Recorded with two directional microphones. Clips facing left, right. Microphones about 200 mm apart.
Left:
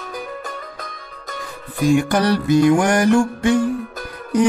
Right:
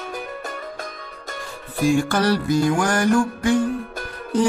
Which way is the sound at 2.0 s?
20° left (ahead or behind).